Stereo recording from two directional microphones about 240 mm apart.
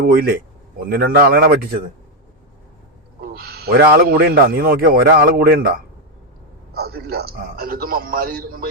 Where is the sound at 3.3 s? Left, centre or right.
Right.